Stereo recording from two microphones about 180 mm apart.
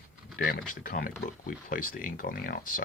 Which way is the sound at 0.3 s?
55° left (ahead or behind).